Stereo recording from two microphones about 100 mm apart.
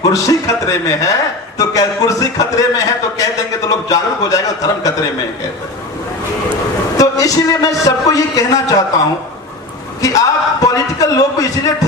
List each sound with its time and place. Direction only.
0.0 s a man's voice: 35° left (ahead or behind)
6.9 s a man's voice: 35° left (ahead or behind)
10.0 s a man's voice: 35° left (ahead or behind)